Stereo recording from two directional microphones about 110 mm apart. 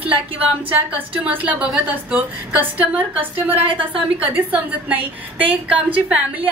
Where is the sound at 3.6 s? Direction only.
55° right (ahead or behind).